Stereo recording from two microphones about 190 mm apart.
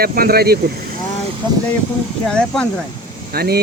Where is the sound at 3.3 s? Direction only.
55° right (ahead or behind).